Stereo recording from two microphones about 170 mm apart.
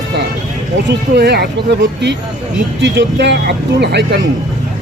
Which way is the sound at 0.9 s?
80° right.